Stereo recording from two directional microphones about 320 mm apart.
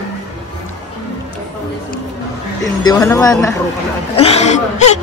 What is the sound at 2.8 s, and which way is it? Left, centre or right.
A woman's voice, centre.